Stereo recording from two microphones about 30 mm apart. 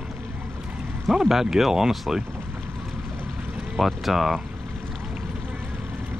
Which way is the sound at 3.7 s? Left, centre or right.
Centre.